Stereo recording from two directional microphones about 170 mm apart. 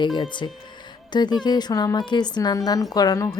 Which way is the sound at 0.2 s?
25° left (ahead or behind).